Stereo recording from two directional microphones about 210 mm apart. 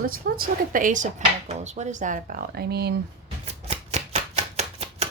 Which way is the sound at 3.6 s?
30° right (ahead or behind).